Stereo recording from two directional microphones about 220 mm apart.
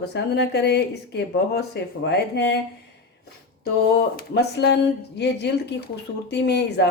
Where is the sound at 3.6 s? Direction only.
45° left (ahead or behind).